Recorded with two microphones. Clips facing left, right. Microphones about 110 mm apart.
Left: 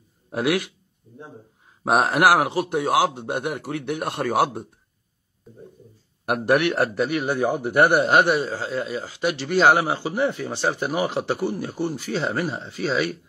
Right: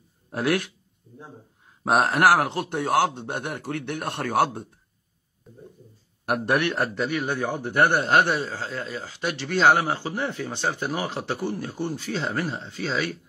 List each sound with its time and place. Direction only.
0.3 s a man's voice: 5° left (ahead or behind)
1.9 s a man's voice: centre (ahead or behind)
6.2 s a man's voice: centre (ahead or behind)
7.0 s a man's voice: 15° left (ahead or behind)